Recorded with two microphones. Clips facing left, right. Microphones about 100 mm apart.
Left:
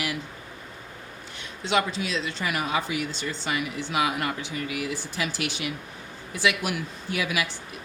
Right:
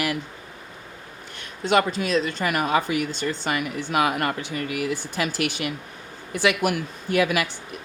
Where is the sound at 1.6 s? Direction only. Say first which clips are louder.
Right 4 dB; 50° right (ahead or behind).